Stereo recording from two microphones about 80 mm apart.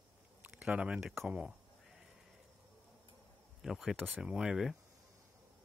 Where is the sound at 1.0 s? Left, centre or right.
Centre.